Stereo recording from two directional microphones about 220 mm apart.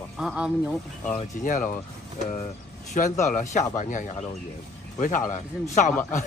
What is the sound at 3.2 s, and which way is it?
A man's voice, 35° left (ahead or behind).